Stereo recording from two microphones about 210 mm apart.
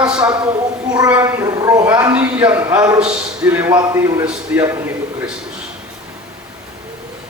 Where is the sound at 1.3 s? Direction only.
15° right (ahead or behind).